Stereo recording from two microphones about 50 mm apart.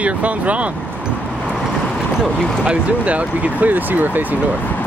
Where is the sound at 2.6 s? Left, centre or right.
Right.